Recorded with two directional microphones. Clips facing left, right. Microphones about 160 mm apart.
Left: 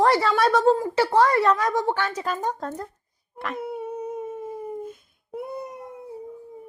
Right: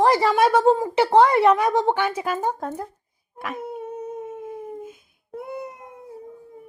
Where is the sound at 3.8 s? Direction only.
10° left (ahead or behind).